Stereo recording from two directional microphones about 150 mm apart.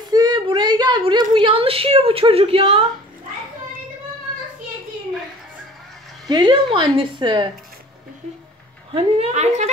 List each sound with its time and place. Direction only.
0.1 s a sound: 30° right (ahead or behind)
1.3 s a woman's voice: 35° right (ahead or behind)
6.2 s a woman's voice: 30° right (ahead or behind)
8.9 s a woman's voice: 45° right (ahead or behind)